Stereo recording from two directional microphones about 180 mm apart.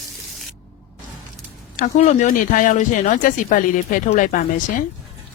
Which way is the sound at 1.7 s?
40° left (ahead or behind).